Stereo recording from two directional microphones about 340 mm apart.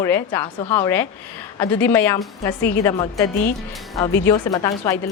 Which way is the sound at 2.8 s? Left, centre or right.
Centre.